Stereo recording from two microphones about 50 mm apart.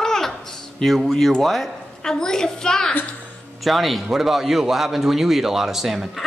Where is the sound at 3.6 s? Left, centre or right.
Centre.